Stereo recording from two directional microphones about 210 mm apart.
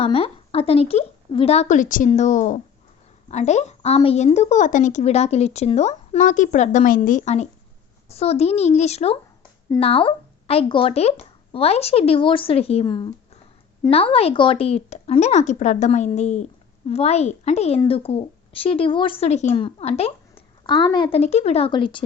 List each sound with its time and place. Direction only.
0.0 s a woman's voice: 30° left (ahead or behind)